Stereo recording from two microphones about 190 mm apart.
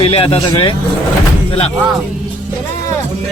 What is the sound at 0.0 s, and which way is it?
Speech, 30° left (ahead or behind).